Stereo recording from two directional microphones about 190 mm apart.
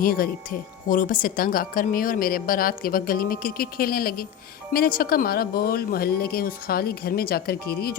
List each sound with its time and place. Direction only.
0.0 s a woman's voice: 50° left (ahead or behind)